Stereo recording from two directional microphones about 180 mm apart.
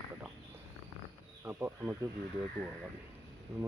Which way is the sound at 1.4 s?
10° right (ahead or behind).